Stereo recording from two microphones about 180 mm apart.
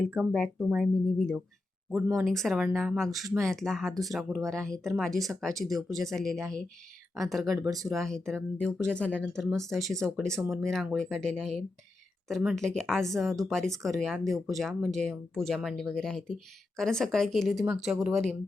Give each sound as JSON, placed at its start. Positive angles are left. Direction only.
{"t": 0.2, "sound": "speech", "side_deg": 5}
{"t": 1.9, "sound": "speech", "side_deg": -10}
{"t": 2.2, "sound": "speech", "side_deg": 0}
{"t": 7.7, "sound": "speech", "side_deg": -20}
{"t": 7.9, "sound": "speech", "side_deg": 5}